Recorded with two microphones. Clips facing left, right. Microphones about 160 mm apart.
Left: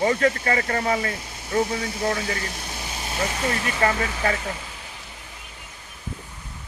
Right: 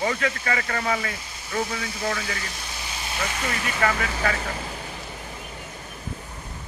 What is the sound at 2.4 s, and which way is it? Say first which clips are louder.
Speech: left 3 dB; 50° left (ahead or behind).